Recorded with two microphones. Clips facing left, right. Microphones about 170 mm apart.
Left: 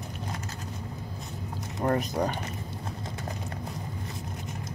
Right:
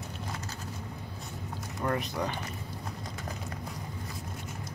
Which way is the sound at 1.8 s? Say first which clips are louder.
Left 5 dB; 40° left (ahead or behind).